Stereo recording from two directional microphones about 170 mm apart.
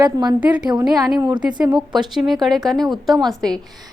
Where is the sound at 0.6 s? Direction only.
25° right (ahead or behind).